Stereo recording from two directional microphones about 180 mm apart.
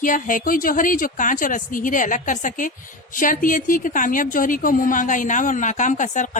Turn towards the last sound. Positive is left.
turn(degrees=45)  # may be behind; listen again after turning